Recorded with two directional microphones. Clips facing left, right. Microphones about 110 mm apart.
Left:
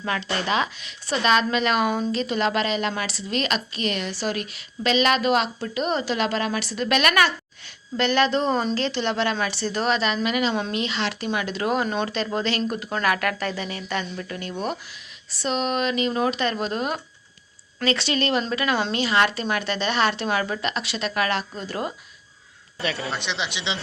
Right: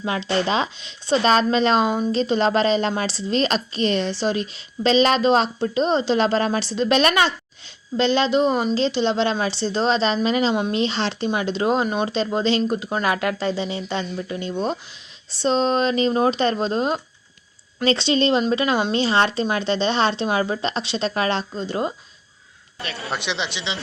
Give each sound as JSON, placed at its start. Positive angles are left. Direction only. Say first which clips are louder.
{"t": 0.0, "sound": "speech", "louder": "right 4 dB", "side_deg": -25}
{"t": 23.1, "sound": "speech", "louder": "right 2 dB", "side_deg": 0}
{"t": 23.5, "sound": "speech", "louder": "even", "side_deg": 15}